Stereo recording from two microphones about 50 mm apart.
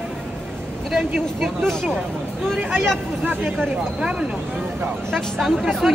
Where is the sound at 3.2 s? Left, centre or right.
Right.